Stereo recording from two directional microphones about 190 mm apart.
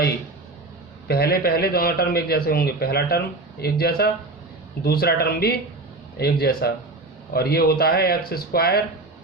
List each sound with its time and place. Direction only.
1.0 s a man's voice: 55° left (ahead or behind)